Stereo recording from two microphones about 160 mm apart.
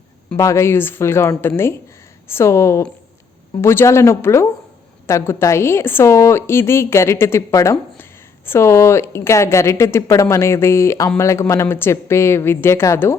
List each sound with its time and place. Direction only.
0.3 s a woman's voice: 20° left (ahead or behind)